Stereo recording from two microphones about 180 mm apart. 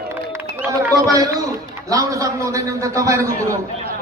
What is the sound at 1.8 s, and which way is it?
A man's voice, 20° right (ahead or behind).